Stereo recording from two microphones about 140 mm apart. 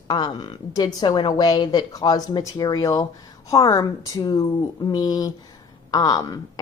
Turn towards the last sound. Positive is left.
turn(degrees=25)  # may be behind; listen again after turning